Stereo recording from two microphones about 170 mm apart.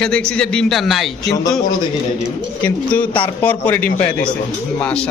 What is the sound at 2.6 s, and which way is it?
A man's voice, 10° left (ahead or behind).